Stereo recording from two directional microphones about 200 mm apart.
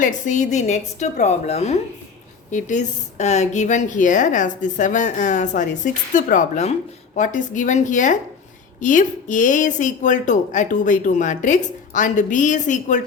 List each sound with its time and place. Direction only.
0.0 s a woman's voice: 35° left (ahead or behind)